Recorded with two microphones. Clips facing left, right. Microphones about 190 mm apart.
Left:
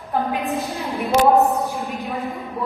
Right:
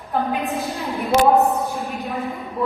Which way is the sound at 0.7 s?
15° left (ahead or behind).